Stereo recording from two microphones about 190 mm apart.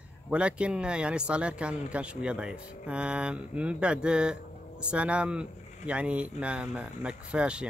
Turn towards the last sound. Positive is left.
turn(degrees=-5)  # may be behind; listen again after turning